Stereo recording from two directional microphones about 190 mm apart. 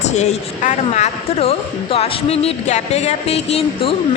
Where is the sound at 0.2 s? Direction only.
40° left (ahead or behind).